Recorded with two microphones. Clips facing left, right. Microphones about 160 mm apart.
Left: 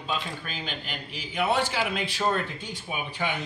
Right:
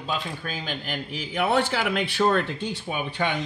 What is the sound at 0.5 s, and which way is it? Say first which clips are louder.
A man's voice: right 4 dB; 45° right (ahead or behind).